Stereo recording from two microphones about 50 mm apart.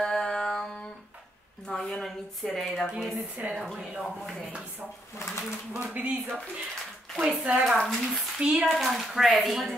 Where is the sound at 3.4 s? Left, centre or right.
Right.